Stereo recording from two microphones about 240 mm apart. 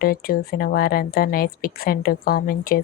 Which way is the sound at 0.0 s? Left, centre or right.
Left.